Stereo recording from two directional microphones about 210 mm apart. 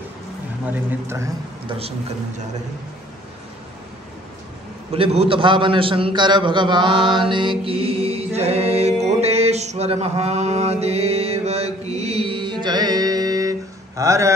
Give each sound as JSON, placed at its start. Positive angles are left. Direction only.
{"t": 0.7, "sound": "speech", "side_deg": -10}
{"t": 4.9, "sound": "a man's voice", "side_deg": -25}
{"t": 9.0, "sound": "mantra", "side_deg": -30}